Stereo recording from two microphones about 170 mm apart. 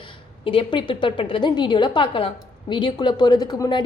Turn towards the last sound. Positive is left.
turn(degrees=25)  # may be behind; listen again after turning